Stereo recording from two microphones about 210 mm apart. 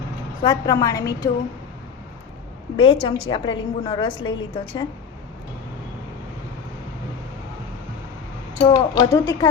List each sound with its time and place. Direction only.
0.4 s a woman's voice: 15° left (ahead or behind)
2.7 s a woman's voice: 25° left (ahead or behind)
8.6 s a woman's voice: 20° left (ahead or behind)